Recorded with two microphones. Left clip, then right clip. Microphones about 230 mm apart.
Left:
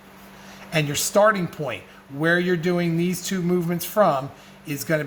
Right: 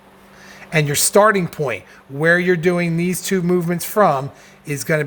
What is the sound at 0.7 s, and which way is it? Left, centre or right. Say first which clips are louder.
Speech: right 6 dB; right.